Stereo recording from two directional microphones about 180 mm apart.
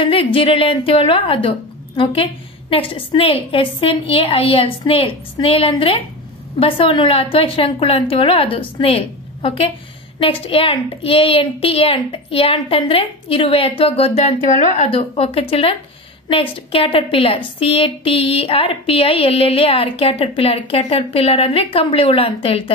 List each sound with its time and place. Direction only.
0.0 s a woman's voice: 30° left (ahead or behind)